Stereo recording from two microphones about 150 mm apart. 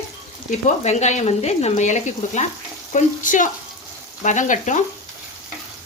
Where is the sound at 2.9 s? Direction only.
60° left (ahead or behind).